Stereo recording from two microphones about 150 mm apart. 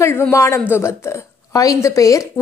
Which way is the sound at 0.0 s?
15° left (ahead or behind).